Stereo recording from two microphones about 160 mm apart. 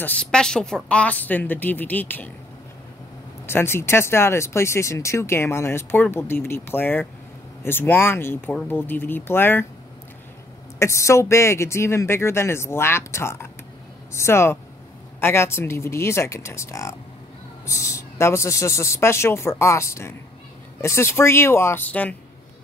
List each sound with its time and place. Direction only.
0.0 s speech: 10° left (ahead or behind)
3.4 s speech: 15° left (ahead or behind)
10.8 s speech: 15° left (ahead or behind)